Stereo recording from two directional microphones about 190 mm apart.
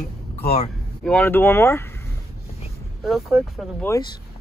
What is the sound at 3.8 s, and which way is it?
Speech, 15° left (ahead or behind).